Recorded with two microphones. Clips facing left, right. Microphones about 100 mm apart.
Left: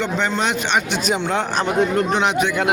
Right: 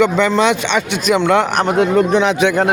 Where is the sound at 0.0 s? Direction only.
90° right.